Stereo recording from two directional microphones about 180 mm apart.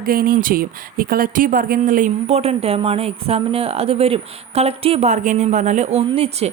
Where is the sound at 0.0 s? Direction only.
55° right (ahead or behind).